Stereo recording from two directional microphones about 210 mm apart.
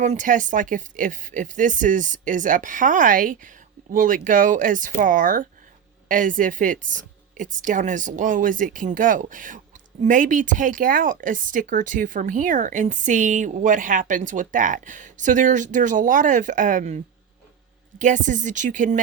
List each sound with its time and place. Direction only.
0.0 s speech: 35° right (ahead or behind)
18.0 s speech: 35° right (ahead or behind)